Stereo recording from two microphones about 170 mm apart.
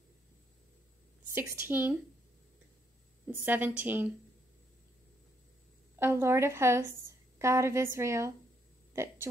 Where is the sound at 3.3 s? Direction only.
10° right (ahead or behind).